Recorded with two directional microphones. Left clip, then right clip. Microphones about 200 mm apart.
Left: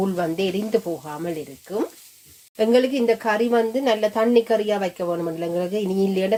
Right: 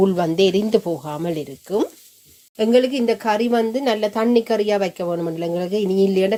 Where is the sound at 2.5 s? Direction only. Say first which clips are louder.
Right 2 dB; 15° right (ahead or behind).